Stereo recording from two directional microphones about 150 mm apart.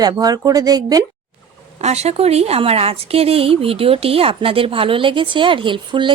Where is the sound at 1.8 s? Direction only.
45° right (ahead or behind).